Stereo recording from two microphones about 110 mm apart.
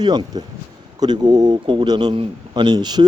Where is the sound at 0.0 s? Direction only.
40° right (ahead or behind).